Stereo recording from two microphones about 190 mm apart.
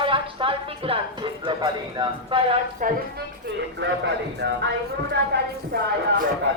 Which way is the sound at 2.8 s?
45° right (ahead or behind).